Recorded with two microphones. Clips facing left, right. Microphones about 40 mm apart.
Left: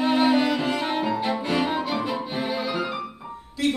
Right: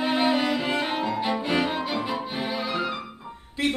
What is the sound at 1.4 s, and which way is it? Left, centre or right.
Music, centre.